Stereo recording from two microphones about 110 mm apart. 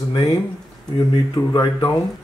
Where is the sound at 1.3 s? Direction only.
40° left (ahead or behind).